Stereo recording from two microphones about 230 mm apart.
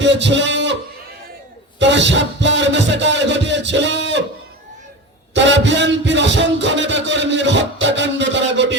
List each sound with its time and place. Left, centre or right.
0.0 s a man's voice: right
1.8 s speech: right
5.3 s music: right